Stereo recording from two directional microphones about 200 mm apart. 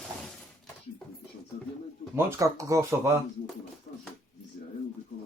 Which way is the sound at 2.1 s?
15° right (ahead or behind).